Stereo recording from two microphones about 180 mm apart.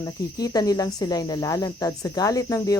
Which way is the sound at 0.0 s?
20° left (ahead or behind).